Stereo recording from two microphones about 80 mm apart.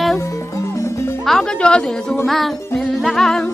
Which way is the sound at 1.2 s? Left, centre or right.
Centre.